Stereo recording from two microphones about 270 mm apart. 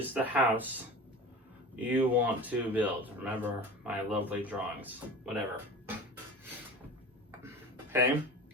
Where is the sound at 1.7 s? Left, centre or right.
Centre.